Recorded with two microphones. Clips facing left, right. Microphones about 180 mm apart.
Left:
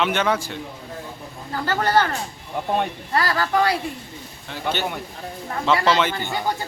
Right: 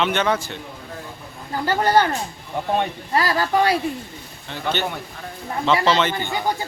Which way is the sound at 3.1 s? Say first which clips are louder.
Right 1 dB; 20° right (ahead or behind).